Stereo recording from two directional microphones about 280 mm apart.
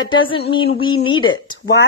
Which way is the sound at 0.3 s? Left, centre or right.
Centre.